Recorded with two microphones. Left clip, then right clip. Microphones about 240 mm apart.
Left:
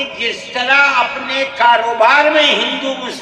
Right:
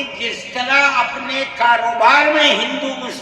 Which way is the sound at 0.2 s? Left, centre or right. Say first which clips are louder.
Left 3 dB; centre.